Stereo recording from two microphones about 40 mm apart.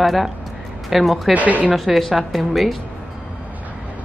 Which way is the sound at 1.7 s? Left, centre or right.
Centre.